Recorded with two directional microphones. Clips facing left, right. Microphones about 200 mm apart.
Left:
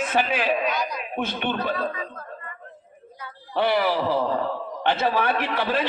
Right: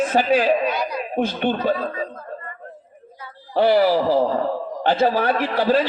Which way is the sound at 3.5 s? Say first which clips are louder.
Right 6 dB; 40° right (ahead or behind).